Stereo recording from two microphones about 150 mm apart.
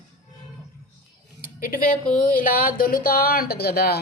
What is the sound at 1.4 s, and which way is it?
Speech, 70° left (ahead or behind).